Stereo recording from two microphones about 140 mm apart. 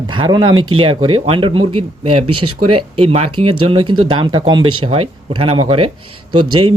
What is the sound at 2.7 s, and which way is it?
Speech, 45° right (ahead or behind).